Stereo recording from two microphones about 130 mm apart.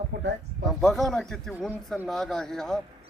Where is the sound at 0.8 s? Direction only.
Centre (ahead or behind).